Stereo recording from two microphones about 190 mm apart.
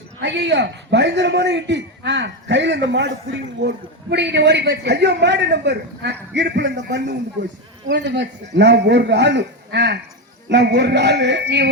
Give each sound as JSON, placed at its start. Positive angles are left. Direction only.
{"t": 0.2, "sound": "a man's voice", "side_deg": -65}